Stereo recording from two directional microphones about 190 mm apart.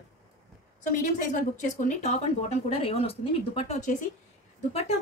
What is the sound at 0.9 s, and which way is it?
A woman's voice, 45° left (ahead or behind).